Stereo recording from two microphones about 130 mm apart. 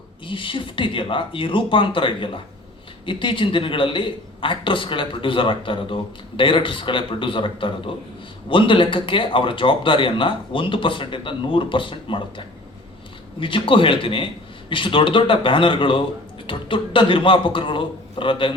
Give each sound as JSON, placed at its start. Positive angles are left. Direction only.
{"t": 0.3, "sound": "a man's voice", "side_deg": 40}